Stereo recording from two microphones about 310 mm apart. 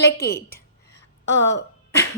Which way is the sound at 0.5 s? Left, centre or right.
Left.